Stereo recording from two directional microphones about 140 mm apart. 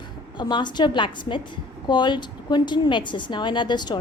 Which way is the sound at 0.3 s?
35° left (ahead or behind).